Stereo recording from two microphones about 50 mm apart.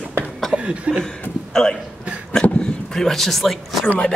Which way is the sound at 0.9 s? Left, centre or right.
Right.